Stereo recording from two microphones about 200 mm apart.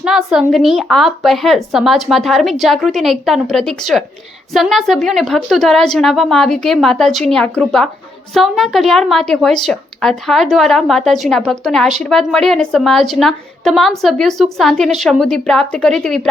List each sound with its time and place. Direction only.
0.0 s a woman's voice: 5° right (ahead or behind)